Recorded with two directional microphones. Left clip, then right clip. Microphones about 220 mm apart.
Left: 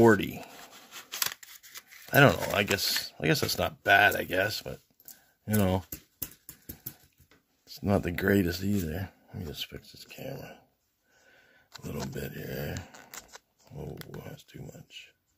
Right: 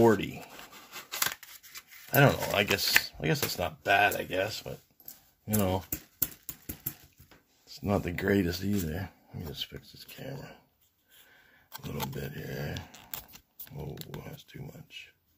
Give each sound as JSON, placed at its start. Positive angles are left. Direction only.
{"t": 0.0, "sound": "speech", "side_deg": 40}
{"t": 0.9, "sound": "scissors", "side_deg": 10}
{"t": 1.4, "sound": "scissors", "side_deg": 25}
{"t": 2.0, "sound": "speech", "side_deg": 40}
{"t": 2.5, "sound": "speech", "side_deg": 30}
{"t": 7.6, "sound": "speech", "side_deg": 35}
{"t": 11.9, "sound": "speech", "side_deg": 35}
{"t": 14.2, "sound": "speech", "side_deg": 25}